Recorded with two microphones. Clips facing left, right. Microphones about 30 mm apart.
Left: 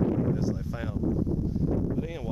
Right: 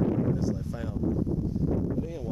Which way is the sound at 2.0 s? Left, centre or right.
Left.